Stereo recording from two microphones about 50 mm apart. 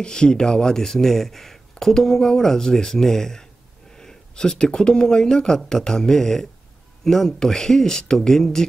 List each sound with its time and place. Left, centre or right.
0.0 s speech: centre